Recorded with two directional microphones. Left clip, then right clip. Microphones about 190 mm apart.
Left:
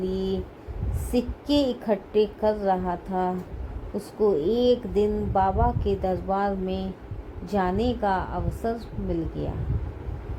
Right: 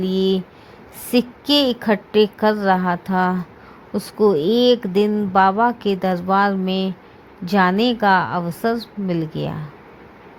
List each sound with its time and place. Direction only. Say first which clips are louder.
0.0 s speech: right 8 dB; 50° right (ahead or behind)